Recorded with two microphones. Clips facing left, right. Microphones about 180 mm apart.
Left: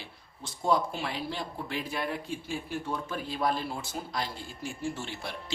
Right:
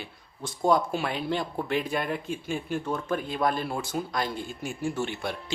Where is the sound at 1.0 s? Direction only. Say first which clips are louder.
Right 6 dB; 65° right (ahead or behind).